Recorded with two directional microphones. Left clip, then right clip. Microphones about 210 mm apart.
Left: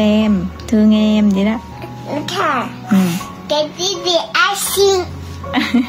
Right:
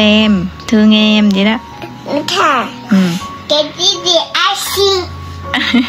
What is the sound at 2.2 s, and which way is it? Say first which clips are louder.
Child singing: right 5 dB; 40° right (ahead or behind).